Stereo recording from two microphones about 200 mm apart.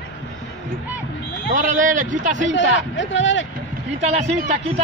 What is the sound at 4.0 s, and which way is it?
Speech, 35° right (ahead or behind).